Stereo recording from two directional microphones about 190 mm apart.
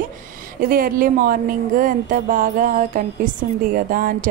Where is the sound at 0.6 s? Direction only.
50° right (ahead or behind).